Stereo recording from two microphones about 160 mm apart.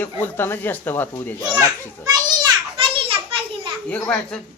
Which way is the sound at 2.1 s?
25° right (ahead or behind).